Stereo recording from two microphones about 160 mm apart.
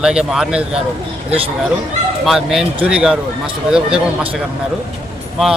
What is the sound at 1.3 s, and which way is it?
Speech, 35° right (ahead or behind).